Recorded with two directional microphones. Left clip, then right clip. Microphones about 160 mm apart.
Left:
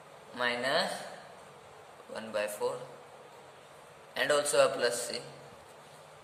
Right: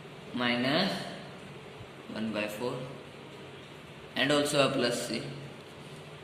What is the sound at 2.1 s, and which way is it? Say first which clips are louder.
Speech: even; 90° left.